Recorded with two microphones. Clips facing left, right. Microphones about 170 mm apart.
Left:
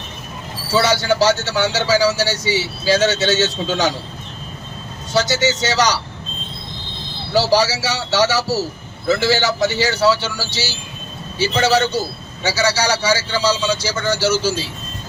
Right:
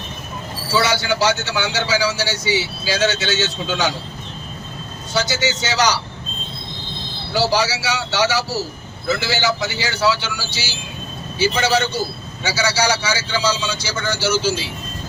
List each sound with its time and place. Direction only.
1.2 s speech: 45° left (ahead or behind)
5.1 s speech: 40° left (ahead or behind)
7.5 s speech: 40° left (ahead or behind)